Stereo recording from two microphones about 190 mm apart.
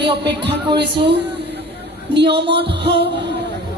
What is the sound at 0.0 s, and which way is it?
Speech, 65° right (ahead or behind).